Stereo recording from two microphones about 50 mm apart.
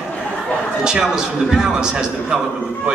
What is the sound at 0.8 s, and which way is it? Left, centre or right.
A man's voice, centre.